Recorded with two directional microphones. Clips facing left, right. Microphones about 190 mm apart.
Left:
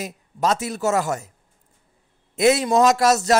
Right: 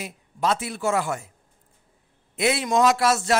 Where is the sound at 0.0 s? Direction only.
40° left (ahead or behind).